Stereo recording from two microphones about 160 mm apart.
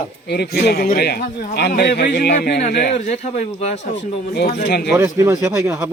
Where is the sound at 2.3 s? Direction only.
80° left.